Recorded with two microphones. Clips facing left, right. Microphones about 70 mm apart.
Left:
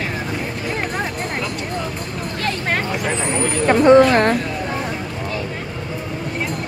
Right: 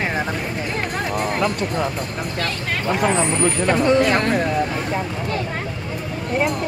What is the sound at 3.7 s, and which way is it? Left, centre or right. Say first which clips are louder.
Speech: left 7 dB; left.